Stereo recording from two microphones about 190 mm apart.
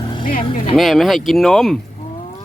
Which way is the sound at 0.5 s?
30° left (ahead or behind).